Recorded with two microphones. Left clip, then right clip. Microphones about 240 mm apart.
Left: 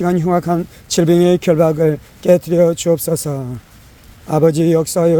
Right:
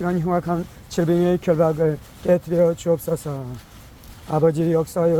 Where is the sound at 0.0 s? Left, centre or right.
Left.